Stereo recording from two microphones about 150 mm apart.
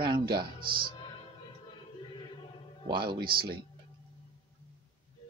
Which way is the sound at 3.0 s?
90° right.